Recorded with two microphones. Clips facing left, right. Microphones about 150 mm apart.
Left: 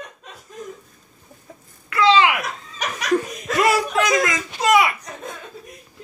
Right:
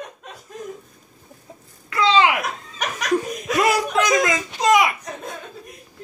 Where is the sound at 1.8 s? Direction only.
25° right (ahead or behind).